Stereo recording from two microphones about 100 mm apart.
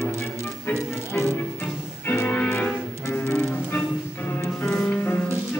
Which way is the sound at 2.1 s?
15° left (ahead or behind).